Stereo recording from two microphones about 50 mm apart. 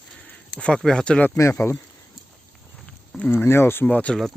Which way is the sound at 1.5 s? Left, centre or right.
Left.